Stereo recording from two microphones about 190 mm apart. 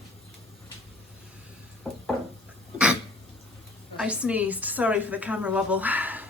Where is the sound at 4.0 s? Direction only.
5° right (ahead or behind).